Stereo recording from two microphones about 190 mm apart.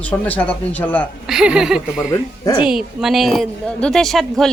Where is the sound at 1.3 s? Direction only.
5° right (ahead or behind).